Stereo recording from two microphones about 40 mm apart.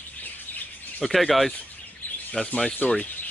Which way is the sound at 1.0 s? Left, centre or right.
Centre.